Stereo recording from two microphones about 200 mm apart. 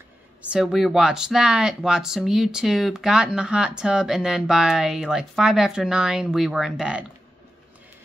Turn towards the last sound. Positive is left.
turn(degrees=-5)  # may be behind; listen again after turning